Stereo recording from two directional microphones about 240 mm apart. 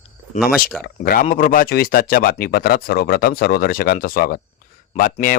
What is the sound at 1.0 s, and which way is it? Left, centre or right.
Speech, left.